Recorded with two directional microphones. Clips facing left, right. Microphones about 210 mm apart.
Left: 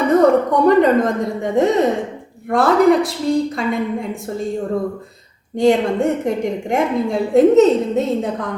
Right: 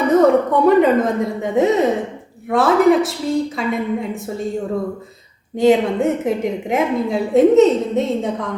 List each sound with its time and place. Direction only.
0.1 s a woman's voice: centre (ahead or behind)
5.5 s a woman's voice: 5° right (ahead or behind)